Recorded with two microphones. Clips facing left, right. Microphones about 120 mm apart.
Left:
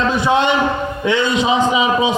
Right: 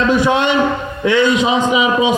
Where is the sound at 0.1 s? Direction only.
30° left (ahead or behind).